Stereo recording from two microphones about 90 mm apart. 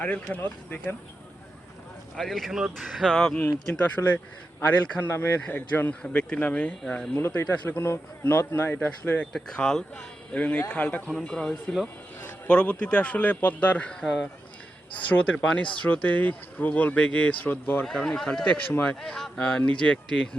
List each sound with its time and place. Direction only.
0.0 s speech: 15° left (ahead or behind)
2.1 s speech: 5° left (ahead or behind)
5.0 s speech: 25° left (ahead or behind)
7.2 s speech: 25° left (ahead or behind)
14.0 s speech: centre (ahead or behind)
14.9 s speech: 15° left (ahead or behind)
17.8 s speech: 5° left (ahead or behind)